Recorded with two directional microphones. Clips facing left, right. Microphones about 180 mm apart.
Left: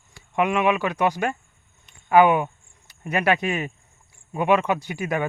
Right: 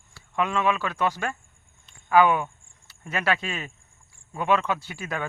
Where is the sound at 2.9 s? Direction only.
15° left (ahead or behind).